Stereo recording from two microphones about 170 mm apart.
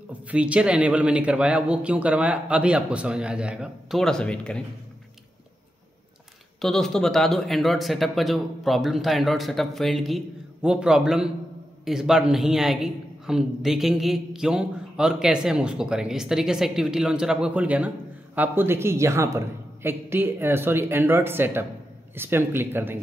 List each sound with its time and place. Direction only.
0.3 s speech: 5° right (ahead or behind)
6.6 s a man's voice: 5° left (ahead or behind)